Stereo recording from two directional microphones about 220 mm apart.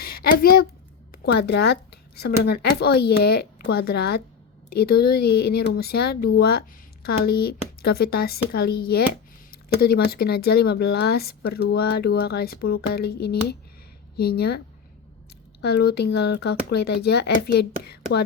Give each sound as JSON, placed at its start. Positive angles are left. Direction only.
{"t": 0.0, "sound": "speech", "side_deg": 45}
{"t": 15.6, "sound": "speech", "side_deg": 45}